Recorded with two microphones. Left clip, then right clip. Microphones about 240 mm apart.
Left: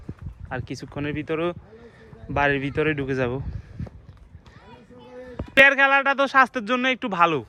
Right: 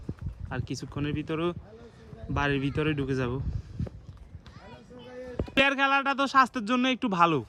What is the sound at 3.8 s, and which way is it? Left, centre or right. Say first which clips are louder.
Walk: even; centre.